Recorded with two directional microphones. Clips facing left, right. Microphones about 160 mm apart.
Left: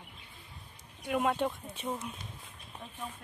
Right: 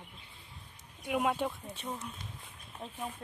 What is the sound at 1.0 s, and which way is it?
Speech, 5° right (ahead or behind).